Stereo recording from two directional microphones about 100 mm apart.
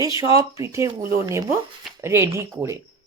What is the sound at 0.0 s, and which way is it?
Speech, 35° right (ahead or behind).